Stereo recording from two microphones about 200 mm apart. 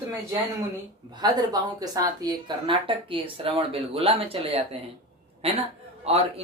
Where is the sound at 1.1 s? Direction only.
20° right (ahead or behind).